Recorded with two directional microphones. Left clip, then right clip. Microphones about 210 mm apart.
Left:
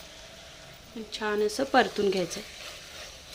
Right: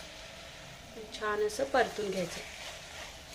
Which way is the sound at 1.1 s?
45° left (ahead or behind).